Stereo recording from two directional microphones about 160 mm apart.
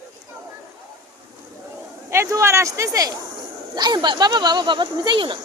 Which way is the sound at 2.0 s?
20° right (ahead or behind).